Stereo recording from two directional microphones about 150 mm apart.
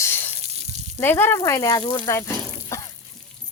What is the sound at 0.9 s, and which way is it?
Speech, 15° left (ahead or behind).